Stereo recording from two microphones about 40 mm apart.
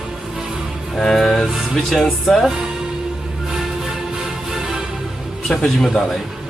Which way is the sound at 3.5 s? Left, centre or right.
Centre.